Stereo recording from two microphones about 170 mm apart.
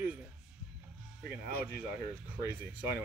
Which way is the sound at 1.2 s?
10° right (ahead or behind).